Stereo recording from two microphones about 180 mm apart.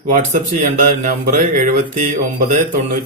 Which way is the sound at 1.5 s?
45° right (ahead or behind).